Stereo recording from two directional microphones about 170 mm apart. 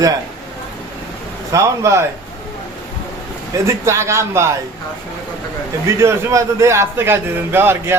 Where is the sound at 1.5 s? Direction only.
15° right (ahead or behind).